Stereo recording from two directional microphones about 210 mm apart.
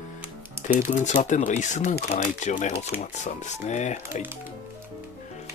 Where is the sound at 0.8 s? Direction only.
35° left (ahead or behind).